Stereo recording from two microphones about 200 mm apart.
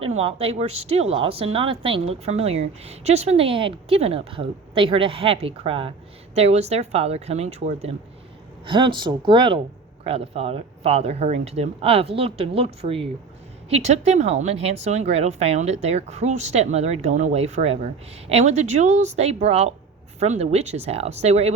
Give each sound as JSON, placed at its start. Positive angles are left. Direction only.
{"t": 0.2, "sound": "a woman's voice", "side_deg": -30}